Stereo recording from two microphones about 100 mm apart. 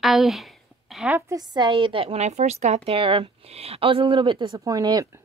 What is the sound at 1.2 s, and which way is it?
Speech, 40° right (ahead or behind).